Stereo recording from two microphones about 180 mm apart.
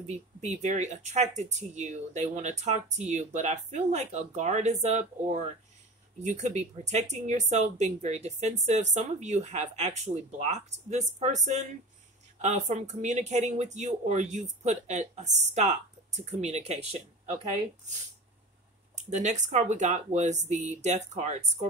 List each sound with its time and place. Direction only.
0.0 s speech: 40° right (ahead or behind)
12.4 s speech: 40° right (ahead or behind)
18.9 s speech: 40° right (ahead or behind)